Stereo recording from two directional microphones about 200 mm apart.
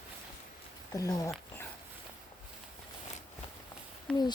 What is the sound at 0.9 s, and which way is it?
Speech, 15° left (ahead or behind).